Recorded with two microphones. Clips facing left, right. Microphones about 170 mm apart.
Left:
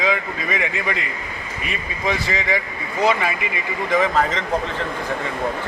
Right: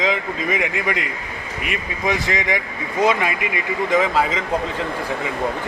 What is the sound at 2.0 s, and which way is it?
Speech, 15° right (ahead or behind).